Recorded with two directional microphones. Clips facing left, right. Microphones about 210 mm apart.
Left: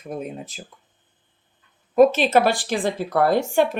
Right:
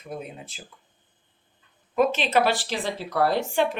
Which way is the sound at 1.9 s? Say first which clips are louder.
Left 7 dB; 40° left (ahead or behind).